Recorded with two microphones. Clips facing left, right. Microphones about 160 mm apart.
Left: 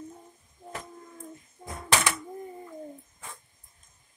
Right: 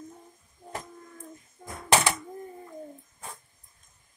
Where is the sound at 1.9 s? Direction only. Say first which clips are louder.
Right 3 dB; 35° right (ahead or behind).